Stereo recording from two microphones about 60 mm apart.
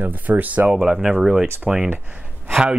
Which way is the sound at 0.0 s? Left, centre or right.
Right.